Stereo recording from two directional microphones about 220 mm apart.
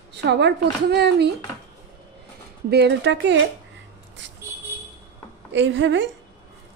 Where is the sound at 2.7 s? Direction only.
50° right (ahead or behind).